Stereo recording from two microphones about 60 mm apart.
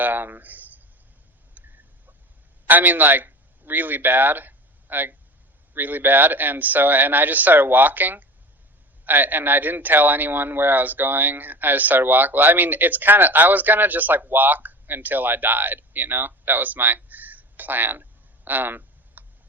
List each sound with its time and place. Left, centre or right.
0.0 s speech: right
1.5 s a sound: right
2.6 s a man's voice: right